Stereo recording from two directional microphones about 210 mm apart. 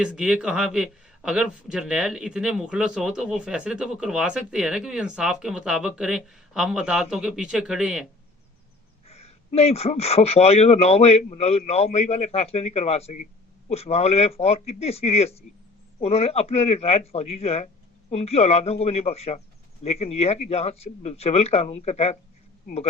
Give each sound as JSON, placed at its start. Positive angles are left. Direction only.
{"t": 0.0, "sound": "speech", "side_deg": -5}
{"t": 9.0, "sound": "speech", "side_deg": 30}